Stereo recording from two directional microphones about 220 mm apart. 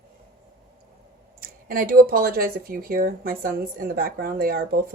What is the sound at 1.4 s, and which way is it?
Speech, 40° right (ahead or behind).